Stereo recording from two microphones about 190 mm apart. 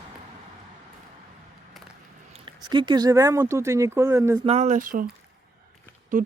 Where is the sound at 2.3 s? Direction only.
25° right (ahead or behind).